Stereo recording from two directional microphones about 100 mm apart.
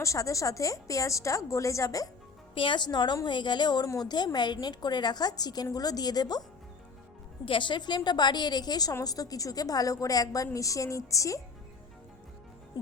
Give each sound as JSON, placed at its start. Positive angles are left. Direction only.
{"t": 0.0, "sound": "a woman's voice", "side_deg": 30}
{"t": 2.6, "sound": "a woman's voice", "side_deg": 50}
{"t": 7.4, "sound": "a woman's voice", "side_deg": 55}